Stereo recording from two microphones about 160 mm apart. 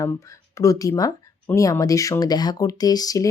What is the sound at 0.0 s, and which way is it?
Speech, 20° left (ahead or behind).